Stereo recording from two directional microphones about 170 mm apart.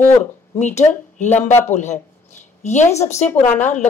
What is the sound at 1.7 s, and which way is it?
A woman's voice, 45° left (ahead or behind).